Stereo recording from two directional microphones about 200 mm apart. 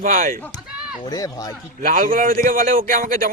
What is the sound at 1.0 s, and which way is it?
Speech, 20° left (ahead or behind).